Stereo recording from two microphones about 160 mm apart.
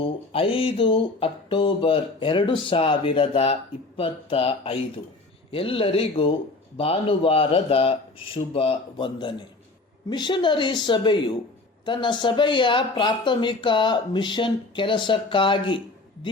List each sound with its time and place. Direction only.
0.0 s a woman's voice: 35° left (ahead or behind)